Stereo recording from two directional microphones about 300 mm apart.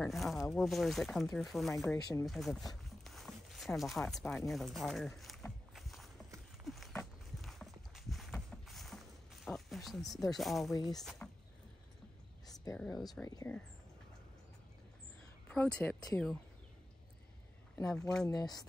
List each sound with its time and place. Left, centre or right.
0.0 s speech: centre
3.0 s a sound: centre
6.6 s walk: centre
10.7 s speech: centre
11.0 s speech: centre
12.4 s speech: centre
13.3 s speech: centre
15.4 s speech: centre
17.7 s speech: centre
18.3 s speech: centre